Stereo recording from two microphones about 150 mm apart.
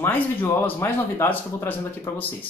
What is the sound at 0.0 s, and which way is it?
Speech, 15° left (ahead or behind).